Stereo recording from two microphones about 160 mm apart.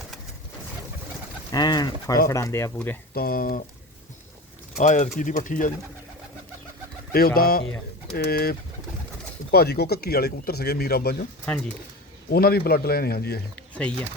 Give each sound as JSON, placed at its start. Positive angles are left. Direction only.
{"t": 1.5, "sound": "speech", "side_deg": 25}
{"t": 3.2, "sound": "speech", "side_deg": 65}
{"t": 4.8, "sound": "speech", "side_deg": 50}
{"t": 7.1, "sound": "a man's voice", "side_deg": 70}
{"t": 9.5, "sound": "speech", "side_deg": 85}
{"t": 12.3, "sound": "a man's voice", "side_deg": 70}